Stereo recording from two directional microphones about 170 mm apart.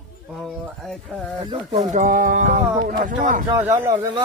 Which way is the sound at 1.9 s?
50° right (ahead or behind).